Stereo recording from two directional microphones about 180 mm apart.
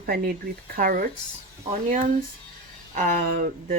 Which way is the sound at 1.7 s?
35° right (ahead or behind).